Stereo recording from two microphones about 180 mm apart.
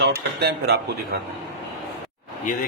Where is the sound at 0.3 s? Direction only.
65° right (ahead or behind).